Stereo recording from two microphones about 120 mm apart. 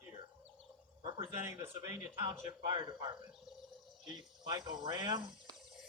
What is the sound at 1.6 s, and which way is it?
Speech, 20° right (ahead or behind).